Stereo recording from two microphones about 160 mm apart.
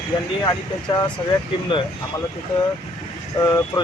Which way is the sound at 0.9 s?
25° left (ahead or behind).